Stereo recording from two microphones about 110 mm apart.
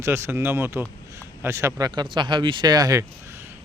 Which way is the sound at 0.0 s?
25° right (ahead or behind).